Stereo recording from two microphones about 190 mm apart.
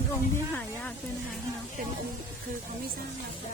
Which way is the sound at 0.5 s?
10° left (ahead or behind).